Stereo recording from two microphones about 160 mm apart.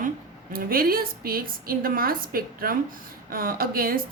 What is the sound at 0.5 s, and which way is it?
A woman's voice, 65° right (ahead or behind).